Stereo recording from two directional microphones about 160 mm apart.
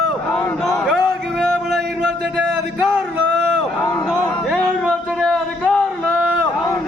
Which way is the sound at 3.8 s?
15° left (ahead or behind).